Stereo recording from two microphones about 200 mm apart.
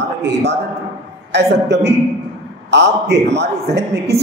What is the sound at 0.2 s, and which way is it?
Speech, 60° right (ahead or behind).